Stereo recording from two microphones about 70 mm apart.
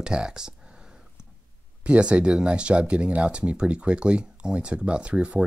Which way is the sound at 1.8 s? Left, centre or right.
Centre.